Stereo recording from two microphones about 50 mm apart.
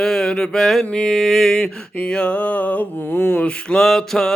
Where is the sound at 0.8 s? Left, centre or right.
Centre.